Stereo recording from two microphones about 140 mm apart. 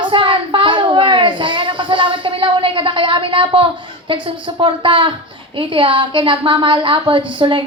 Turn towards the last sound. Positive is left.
turn(degrees=-35)  # may be behind; listen again after turning